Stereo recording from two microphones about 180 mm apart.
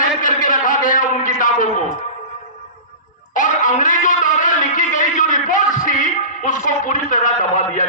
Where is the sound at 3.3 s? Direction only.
45° left (ahead or behind).